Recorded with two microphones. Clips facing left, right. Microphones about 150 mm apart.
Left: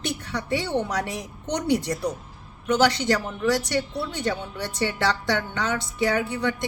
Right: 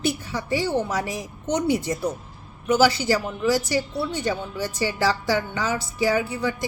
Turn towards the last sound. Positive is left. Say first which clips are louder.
# right 1 dB
turn(degrees=-5)  # may be behind; listen again after turning